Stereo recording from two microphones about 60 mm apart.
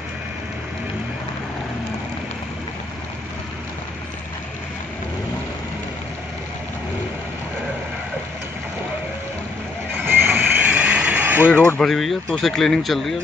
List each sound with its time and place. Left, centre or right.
9.9 s vehicle: right
11.4 s speech: left
11.8 s speech: centre